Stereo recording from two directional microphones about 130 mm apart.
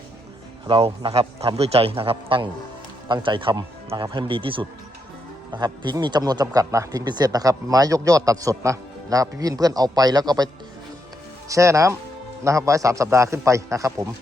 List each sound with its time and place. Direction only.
0.7 s a man's voice: 45° right (ahead or behind); by 14.1 s 25° right (ahead or behind)